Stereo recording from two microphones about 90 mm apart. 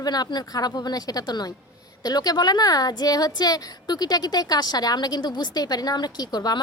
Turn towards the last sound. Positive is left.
turn(degrees=50)  # may be behind; listen again after turning